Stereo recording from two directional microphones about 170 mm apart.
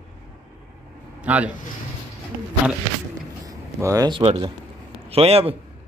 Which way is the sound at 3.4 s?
20° right (ahead or behind).